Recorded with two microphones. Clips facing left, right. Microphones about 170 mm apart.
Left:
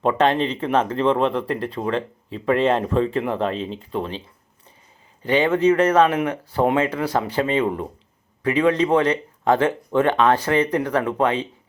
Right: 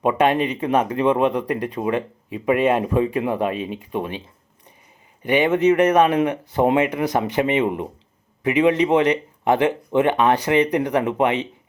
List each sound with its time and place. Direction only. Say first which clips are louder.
0.0 s speech: right 1 dB; 15° right (ahead or behind)
5.2 s speech: right 1 dB; 15° right (ahead or behind)